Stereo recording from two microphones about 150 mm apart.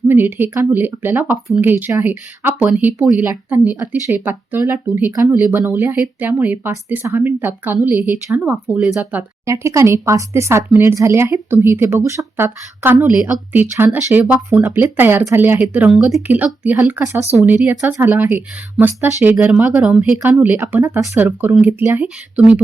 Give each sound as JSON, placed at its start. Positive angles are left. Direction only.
{"t": 0.1, "sound": "speech", "side_deg": -15}
{"t": 9.5, "sound": "speech", "side_deg": -20}